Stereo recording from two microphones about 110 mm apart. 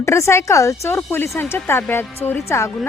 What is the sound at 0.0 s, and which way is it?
A woman's voice, 25° left (ahead or behind).